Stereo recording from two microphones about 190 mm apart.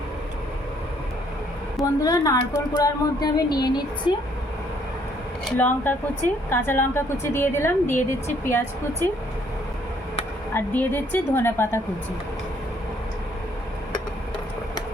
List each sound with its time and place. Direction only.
1.8 s speech: 20° left (ahead or behind)
5.5 s a woman's voice: 10° left (ahead or behind)
10.5 s a woman's voice: 10° left (ahead or behind)